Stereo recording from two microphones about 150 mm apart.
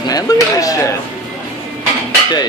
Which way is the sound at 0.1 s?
25° left (ahead or behind).